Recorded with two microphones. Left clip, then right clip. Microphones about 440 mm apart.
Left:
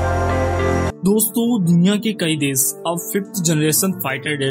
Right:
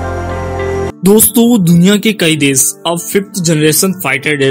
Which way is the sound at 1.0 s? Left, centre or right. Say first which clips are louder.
Right 10 dB; left.